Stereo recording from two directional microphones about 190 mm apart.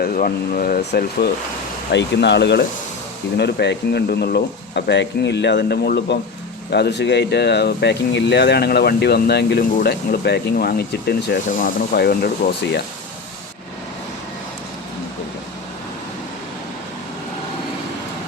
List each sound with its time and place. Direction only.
0.0 s speech: 50° left (ahead or behind)
1.9 s speech: 65° left (ahead or behind)
11.4 s speech: 45° left (ahead or behind)